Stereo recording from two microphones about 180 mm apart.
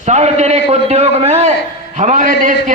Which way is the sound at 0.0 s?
40° right (ahead or behind).